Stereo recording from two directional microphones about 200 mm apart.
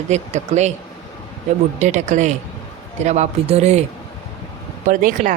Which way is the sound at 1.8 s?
35° right (ahead or behind).